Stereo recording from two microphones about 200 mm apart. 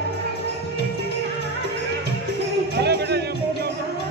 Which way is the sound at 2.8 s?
55° right (ahead or behind).